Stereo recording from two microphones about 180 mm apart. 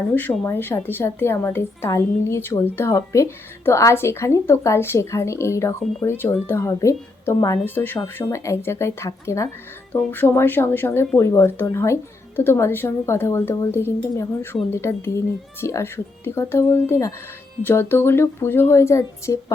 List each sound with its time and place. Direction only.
0.1 s a woman's voice: 10° left (ahead or behind)